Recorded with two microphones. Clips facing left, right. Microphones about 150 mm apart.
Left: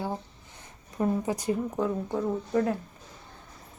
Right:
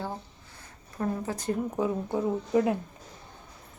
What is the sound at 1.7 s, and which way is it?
Speech, 5° right (ahead or behind).